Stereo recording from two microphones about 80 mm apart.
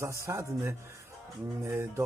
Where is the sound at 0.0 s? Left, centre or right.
Right.